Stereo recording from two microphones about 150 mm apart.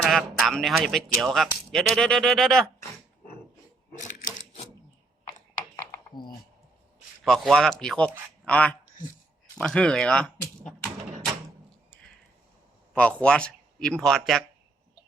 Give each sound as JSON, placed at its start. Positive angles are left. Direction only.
{"t": 0.1, "sound": "a man's voice", "side_deg": 0}
{"t": 7.3, "sound": "a man's voice", "side_deg": 0}
{"t": 12.9, "sound": "speech", "side_deg": 10}